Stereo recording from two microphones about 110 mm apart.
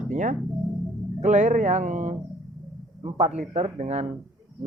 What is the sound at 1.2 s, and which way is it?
Speech, 90° right.